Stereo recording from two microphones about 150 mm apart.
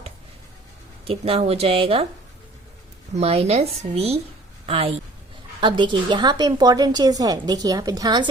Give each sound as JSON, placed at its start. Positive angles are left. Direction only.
{"t": 1.0, "sound": "speech", "side_deg": -40}
{"t": 3.2, "sound": "a woman's voice", "side_deg": -40}